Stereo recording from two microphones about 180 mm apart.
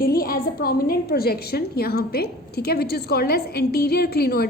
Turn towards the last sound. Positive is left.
turn(degrees=60)  # may be behind; listen again after turning